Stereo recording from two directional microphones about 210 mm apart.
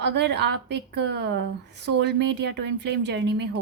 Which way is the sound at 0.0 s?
55° right (ahead or behind).